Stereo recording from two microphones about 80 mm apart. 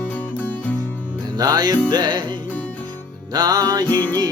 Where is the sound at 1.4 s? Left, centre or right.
Right.